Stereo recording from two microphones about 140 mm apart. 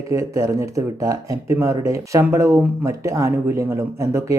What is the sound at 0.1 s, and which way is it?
Speech, 20° right (ahead or behind).